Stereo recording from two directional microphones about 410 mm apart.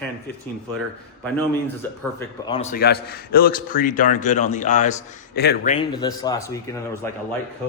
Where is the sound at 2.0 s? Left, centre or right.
Centre; by 5.7 s left.